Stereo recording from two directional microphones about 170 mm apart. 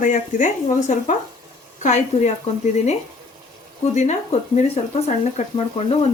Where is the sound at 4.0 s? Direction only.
40° left (ahead or behind).